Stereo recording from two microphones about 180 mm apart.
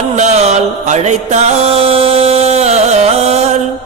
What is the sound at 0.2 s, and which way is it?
Mantra, 40° right (ahead or behind).